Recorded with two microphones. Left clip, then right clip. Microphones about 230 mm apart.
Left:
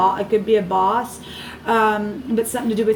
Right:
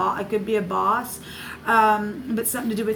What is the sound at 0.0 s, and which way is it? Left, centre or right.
A woman's voice, right.